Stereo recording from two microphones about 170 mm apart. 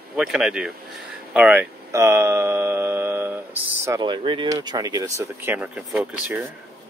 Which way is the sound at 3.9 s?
25° right (ahead or behind).